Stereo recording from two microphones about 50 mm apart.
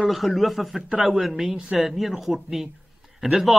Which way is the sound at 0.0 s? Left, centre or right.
Centre.